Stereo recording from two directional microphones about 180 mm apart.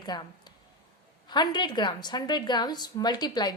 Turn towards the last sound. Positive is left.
turn(degrees=20)  # may be behind; listen again after turning